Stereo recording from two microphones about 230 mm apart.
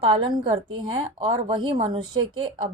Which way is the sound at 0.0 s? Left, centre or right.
Right.